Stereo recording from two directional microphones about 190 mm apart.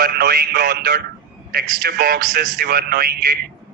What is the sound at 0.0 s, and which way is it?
Speech, 55° right (ahead or behind).